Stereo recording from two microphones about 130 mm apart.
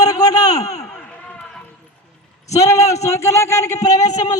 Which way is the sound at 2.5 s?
25° left (ahead or behind).